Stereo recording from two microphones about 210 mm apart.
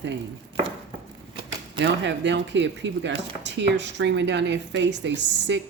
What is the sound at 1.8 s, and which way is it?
Speech, 60° right (ahead or behind).